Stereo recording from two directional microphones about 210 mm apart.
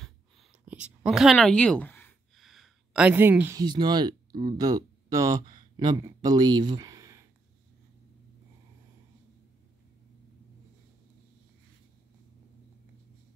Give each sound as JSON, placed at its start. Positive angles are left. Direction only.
{"t": 0.0, "sound": "whispering", "side_deg": 0}
{"t": 1.0, "sound": "a sound", "side_deg": 0}
{"t": 2.4, "sound": "speech", "side_deg": 0}